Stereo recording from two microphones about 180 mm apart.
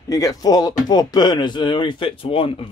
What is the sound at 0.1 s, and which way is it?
Speech, 20° left (ahead or behind).